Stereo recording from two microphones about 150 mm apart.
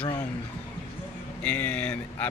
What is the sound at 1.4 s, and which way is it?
Speech, 10° left (ahead or behind).